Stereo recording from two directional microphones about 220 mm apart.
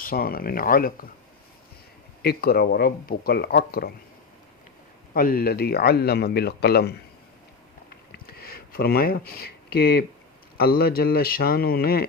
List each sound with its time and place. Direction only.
0.0 s speech: 40° left (ahead or behind)
2.2 s a man's voice: 45° left (ahead or behind)
5.1 s a man's voice: 40° left (ahead or behind)
8.3 s a man's voice: 45° left (ahead or behind)